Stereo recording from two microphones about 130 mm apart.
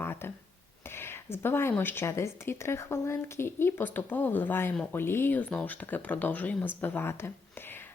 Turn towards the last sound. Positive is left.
turn(degrees=15)  # may be behind; listen again after turning